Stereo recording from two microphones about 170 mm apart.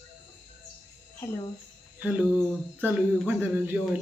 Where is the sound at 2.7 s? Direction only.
10° right (ahead or behind).